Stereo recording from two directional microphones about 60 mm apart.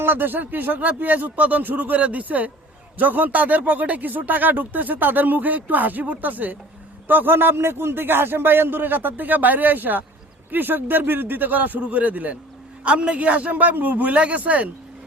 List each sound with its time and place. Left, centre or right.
0.0 s a man's voice: right